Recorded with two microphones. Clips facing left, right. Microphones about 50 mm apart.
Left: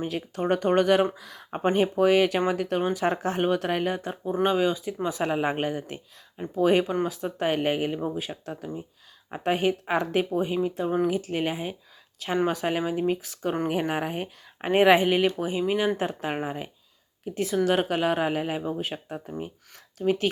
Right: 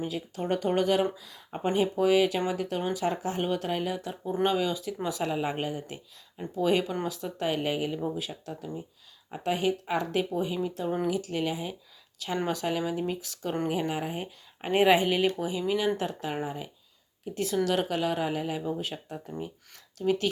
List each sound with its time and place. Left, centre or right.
0.0 s speech: left
4.4 s speech: left
6.4 s speech: left
11.1 s speech: left
14.7 s speech: left
16.3 s speech: left
17.3 s speech: left
18.8 s speech: left